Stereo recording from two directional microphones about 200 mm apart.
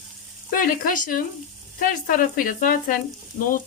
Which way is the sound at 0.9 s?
45° left (ahead or behind).